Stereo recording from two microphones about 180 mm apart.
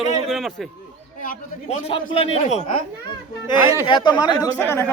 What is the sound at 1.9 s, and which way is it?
Speech, 30° left (ahead or behind).